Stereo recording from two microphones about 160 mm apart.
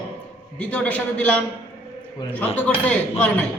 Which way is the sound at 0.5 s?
10° left (ahead or behind).